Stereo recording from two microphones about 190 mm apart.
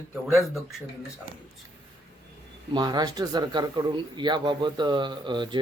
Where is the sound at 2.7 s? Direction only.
20° right (ahead or behind).